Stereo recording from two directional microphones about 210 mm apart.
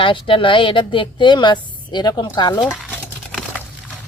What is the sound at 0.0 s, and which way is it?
A woman's voice, 25° left (ahead or behind).